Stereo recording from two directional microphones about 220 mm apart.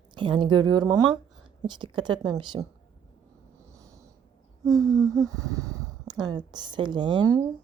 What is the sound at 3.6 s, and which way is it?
Snort, 15° right (ahead or behind).